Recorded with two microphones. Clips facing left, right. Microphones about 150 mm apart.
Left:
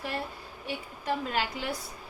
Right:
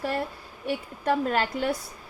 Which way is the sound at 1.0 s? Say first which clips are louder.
Right 6 dB; 50° right (ahead or behind).